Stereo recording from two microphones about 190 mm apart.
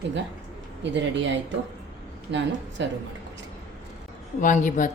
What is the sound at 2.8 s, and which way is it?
Speech, 70° right (ahead or behind).